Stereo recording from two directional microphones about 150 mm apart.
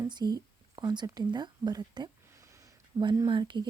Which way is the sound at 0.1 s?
30° right (ahead or behind).